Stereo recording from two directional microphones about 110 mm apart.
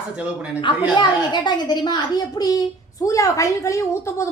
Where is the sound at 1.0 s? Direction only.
40° left (ahead or behind).